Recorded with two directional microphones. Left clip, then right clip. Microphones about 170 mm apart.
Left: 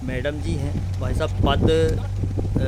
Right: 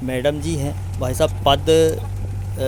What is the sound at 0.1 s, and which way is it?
Speech, 35° right (ahead or behind).